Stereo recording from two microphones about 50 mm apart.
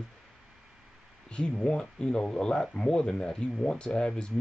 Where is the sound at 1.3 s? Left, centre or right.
Centre.